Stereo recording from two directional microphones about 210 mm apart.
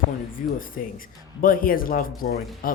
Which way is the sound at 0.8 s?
40° left (ahead or behind).